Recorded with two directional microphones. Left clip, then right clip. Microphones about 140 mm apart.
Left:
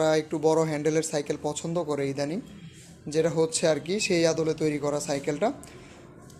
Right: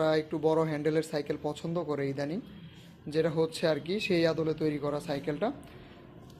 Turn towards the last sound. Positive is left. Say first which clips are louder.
# left 5 dB
turn(degrees=20)  # may be behind; listen again after turning